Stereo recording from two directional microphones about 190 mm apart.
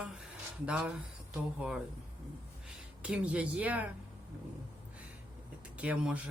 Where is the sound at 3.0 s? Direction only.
5° right (ahead or behind).